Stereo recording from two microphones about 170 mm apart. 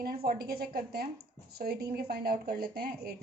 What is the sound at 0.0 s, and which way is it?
Speech, 60° right (ahead or behind).